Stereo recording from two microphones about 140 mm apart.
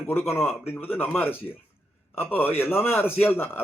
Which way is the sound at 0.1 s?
15° left (ahead or behind).